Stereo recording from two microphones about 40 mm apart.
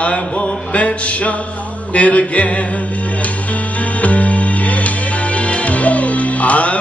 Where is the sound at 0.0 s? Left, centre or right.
Left.